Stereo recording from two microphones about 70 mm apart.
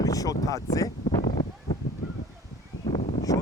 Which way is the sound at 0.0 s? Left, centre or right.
Left.